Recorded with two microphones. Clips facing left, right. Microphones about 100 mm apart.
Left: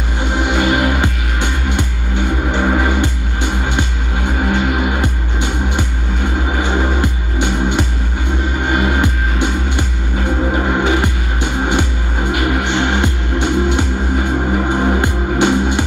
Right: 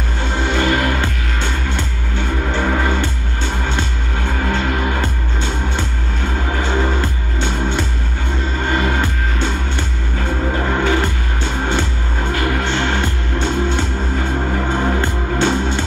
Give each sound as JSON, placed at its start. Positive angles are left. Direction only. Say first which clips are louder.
{"t": 0.2, "sound": "music", "louder": "left 2 dB", "side_deg": 15}